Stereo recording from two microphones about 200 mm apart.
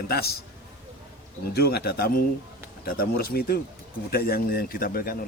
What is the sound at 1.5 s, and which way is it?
A man's voice, 50° left (ahead or behind).